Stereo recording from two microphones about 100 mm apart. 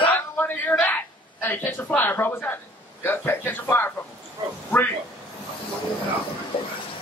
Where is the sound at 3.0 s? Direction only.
20° left (ahead or behind).